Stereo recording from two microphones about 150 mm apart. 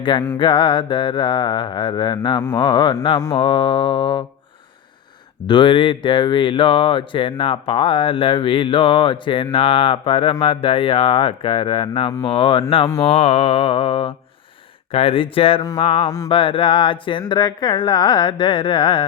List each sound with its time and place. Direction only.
0.0 s speech: 30° left (ahead or behind)
5.5 s speech: 35° left (ahead or behind)
15.8 s music: 45° left (ahead or behind)
16.0 s music: 25° left (ahead or behind)
16.3 s speech: 35° left (ahead or behind)